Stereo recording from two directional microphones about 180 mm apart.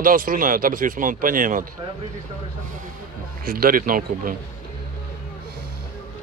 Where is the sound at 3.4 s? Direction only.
55° right (ahead or behind).